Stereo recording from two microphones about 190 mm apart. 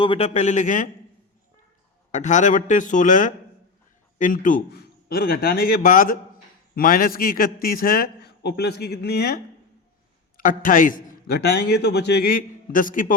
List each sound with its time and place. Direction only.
0.0 s speech: 30° left (ahead or behind)
2.1 s a man's voice: 40° left (ahead or behind)